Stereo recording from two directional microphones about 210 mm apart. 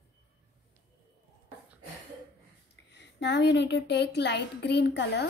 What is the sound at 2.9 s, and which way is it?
A woman's voice, 55° left (ahead or behind).